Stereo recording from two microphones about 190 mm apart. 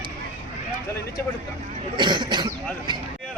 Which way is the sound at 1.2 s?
10° left (ahead or behind).